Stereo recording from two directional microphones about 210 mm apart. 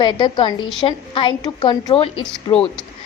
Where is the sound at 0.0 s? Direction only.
20° left (ahead or behind).